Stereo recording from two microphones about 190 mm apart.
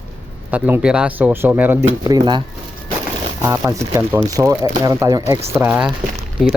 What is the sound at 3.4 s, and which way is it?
Speech, 15° right (ahead or behind).